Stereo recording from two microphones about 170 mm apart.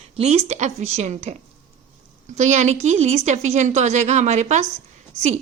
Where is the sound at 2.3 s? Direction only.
45° right (ahead or behind).